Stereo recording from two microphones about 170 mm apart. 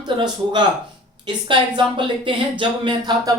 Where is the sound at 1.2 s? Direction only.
25° right (ahead or behind).